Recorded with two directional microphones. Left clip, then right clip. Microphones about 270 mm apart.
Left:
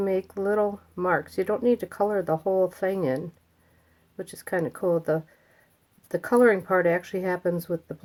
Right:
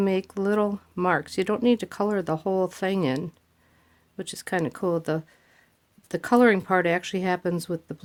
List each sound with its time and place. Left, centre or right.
0.0 s speech: right